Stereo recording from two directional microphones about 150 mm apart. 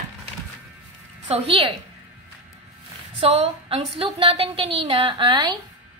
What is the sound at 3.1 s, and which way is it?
A woman's voice, 40° right (ahead or behind).